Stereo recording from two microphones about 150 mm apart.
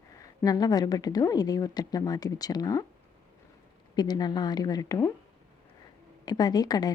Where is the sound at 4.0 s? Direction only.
25° left (ahead or behind).